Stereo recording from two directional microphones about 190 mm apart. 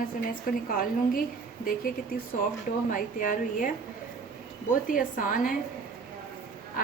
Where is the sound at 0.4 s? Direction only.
50° left (ahead or behind).